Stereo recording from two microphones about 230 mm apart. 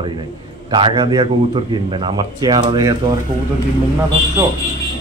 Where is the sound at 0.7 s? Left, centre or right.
Right.